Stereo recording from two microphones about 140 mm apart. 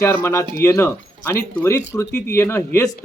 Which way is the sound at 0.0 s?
20° left (ahead or behind).